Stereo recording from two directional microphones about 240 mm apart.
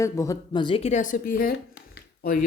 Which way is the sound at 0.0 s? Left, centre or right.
Centre.